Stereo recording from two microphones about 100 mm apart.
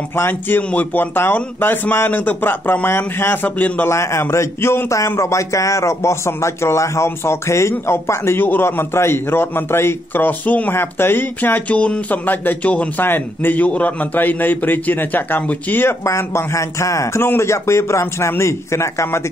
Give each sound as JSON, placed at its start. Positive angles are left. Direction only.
{"t": 0.1, "sound": "a man's voice", "side_deg": 20}
{"t": 3.9, "sound": "a man's voice", "side_deg": 30}